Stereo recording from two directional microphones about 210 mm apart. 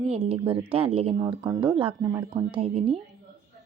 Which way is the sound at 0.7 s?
25° right (ahead or behind).